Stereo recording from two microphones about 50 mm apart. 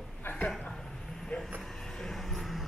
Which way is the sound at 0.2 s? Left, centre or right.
Left.